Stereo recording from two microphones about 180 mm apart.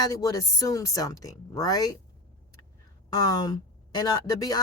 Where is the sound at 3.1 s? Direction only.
20° left (ahead or behind).